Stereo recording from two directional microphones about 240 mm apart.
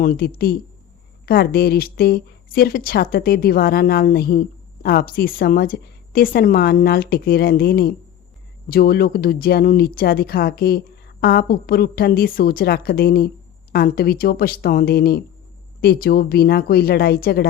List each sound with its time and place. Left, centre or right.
0.0 s speech: left